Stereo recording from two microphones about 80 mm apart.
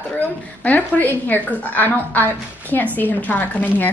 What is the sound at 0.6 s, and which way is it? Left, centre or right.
A woman's voice, left.